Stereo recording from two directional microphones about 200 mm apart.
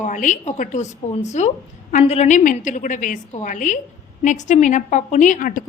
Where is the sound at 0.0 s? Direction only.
40° left (ahead or behind).